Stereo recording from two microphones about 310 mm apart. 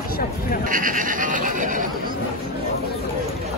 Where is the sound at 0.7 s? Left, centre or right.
Right.